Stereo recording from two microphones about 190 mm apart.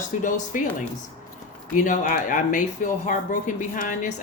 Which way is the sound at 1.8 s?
45° left (ahead or behind).